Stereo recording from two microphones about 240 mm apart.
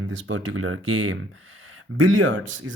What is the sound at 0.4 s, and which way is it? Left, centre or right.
Speech, right.